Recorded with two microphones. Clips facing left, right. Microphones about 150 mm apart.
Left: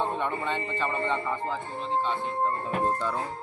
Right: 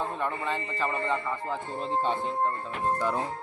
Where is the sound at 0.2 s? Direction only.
Centre (ahead or behind).